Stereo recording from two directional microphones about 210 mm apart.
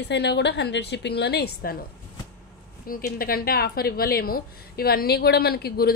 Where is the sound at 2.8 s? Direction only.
45° left (ahead or behind).